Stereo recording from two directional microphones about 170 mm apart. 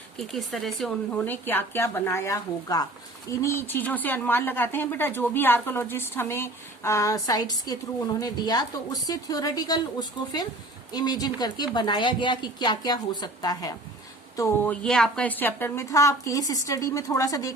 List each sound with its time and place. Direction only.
0.2 s speech: centre (ahead or behind)
14.8 s speech: 5° left (ahead or behind); by 17.5 s 20° left (ahead or behind)